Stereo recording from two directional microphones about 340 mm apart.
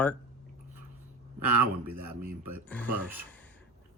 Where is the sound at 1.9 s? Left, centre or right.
Right.